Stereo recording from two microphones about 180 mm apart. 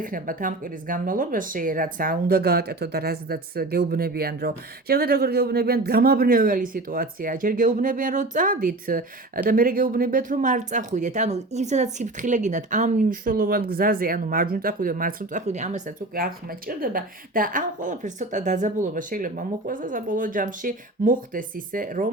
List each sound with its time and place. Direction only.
0.0 s speech: 50° right (ahead or behind)